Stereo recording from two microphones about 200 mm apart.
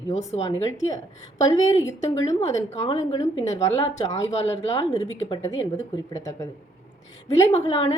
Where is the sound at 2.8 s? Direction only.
25° left (ahead or behind).